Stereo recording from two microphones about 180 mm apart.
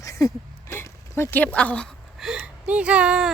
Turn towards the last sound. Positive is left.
turn(degrees=-5)  # may be behind; listen again after turning